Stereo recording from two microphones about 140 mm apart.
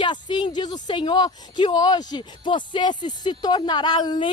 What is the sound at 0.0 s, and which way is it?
Speech, 35° left (ahead or behind).